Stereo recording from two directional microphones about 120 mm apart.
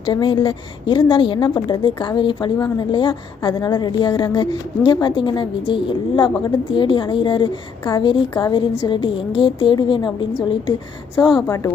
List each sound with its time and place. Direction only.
0.0 s a woman's voice: 40° left (ahead or behind)
11.4 s speech: 25° left (ahead or behind)